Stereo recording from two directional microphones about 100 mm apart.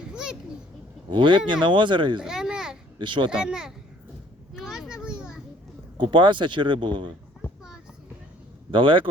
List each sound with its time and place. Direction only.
0.1 s children playing: 10° right (ahead or behind)
1.1 s speech: 55° right (ahead or behind)
2.2 s a sound: 5° right (ahead or behind)
3.0 s speech: 55° right (ahead or behind)
3.3 s a child's voice: 5° right (ahead or behind)
4.5 s a sound: 5° right (ahead or behind)
5.0 s children playing: 5° right (ahead or behind)
6.0 s speech: 55° right (ahead or behind)
8.7 s speech: 55° right (ahead or behind)